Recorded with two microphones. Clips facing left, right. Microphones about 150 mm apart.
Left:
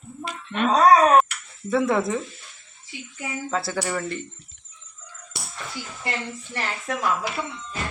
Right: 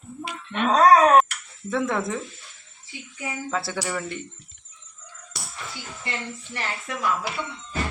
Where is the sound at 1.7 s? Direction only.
5° left (ahead or behind).